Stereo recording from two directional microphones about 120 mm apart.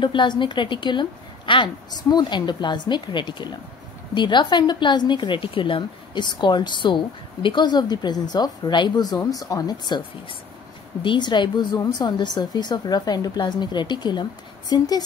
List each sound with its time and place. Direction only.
0.0 s a woman's voice: 40° left (ahead or behind)